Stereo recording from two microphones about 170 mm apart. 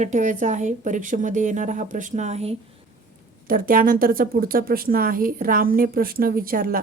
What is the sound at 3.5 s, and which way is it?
Speech, 55° right (ahead or behind).